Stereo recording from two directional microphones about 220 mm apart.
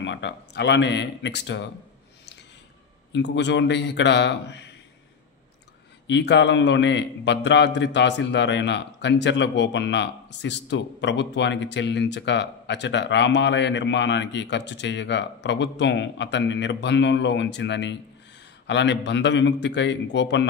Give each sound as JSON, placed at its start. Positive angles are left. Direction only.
{"t": 0.0, "sound": "a man's voice", "side_deg": 55}
{"t": 3.1, "sound": "a man's voice", "side_deg": 50}
{"t": 6.0, "sound": "a man's voice", "side_deg": 55}